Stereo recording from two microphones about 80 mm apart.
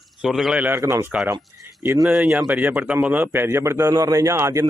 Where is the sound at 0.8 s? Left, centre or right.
Right.